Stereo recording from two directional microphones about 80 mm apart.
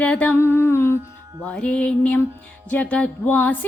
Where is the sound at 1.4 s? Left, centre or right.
Centre.